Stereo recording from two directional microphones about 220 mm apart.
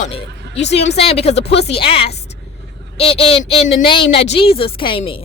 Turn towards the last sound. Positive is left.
turn(degrees=25)  # may be behind; listen again after turning